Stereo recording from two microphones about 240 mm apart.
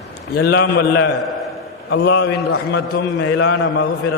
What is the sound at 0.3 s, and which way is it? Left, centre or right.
A man's voice, left.